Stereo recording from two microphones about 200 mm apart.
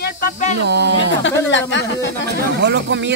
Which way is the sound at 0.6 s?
55° right (ahead or behind).